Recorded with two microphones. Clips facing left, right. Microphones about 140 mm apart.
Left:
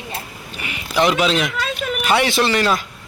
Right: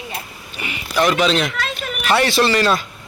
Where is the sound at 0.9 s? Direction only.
20° left (ahead or behind).